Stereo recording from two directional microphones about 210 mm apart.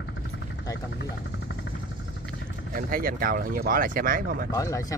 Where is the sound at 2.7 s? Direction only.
40° right (ahead or behind).